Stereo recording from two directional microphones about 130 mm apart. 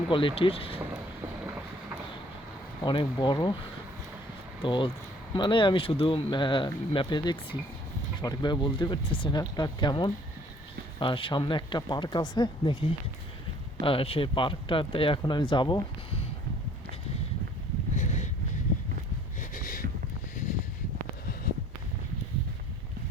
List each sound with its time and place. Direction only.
0.1 s speech: 40° left (ahead or behind)
2.8 s speech: 40° left (ahead or behind)
4.6 s speech: 40° left (ahead or behind)
13.8 s speech: 45° left (ahead or behind)
17.9 s a sound: 70° left (ahead or behind)
19.4 s a sound: 90° left